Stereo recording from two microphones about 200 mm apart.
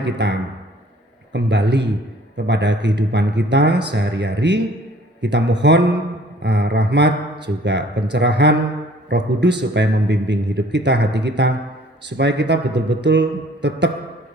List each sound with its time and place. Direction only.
0.0 s a man's voice: 60° right (ahead or behind)